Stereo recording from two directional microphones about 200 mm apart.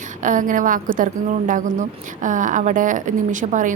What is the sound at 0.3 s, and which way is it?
A woman's voice, 40° right (ahead or behind).